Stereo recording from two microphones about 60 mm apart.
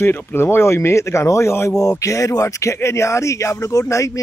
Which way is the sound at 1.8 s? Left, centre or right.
Left.